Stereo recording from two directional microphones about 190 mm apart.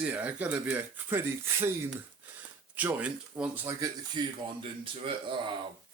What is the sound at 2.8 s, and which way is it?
Speech, 10° right (ahead or behind).